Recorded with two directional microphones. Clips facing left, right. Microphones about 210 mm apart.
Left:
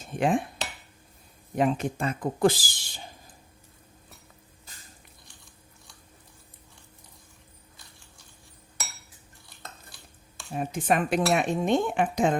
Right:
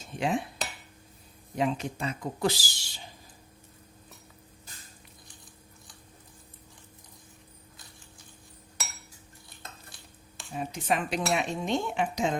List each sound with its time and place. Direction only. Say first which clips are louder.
0.0 s cutlery: left 4 dB; 55° left (ahead or behind)
1.5 s speech: left 4 dB; 50° left (ahead or behind)
10.5 s speech: left 4 dB; 50° left (ahead or behind)